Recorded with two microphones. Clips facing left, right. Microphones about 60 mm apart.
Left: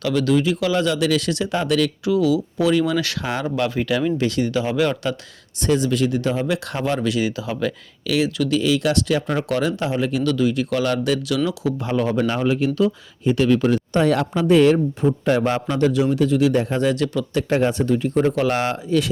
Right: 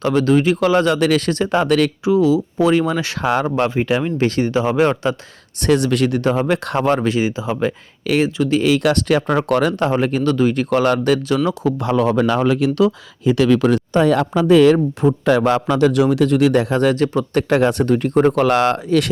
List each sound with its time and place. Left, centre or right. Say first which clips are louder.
0.0 s speech: right 4 dB; right
2.0 s speech: right 4 dB; right
5.5 s speech: right 3 dB; right
8.0 s speech: right 3 dB; right
8.6 s speech: right 4 dB; right
11.8 s speech: right 4 dB; right
15.2 s a man's voice: right 4 dB; right
16.8 s speech: right 4 dB; right
17.5 s speech: right 3 dB; right